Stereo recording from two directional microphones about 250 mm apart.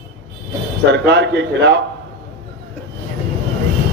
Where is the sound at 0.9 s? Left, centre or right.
Right.